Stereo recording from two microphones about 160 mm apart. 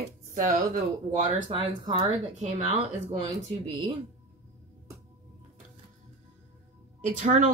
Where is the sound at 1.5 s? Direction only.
35° right (ahead or behind).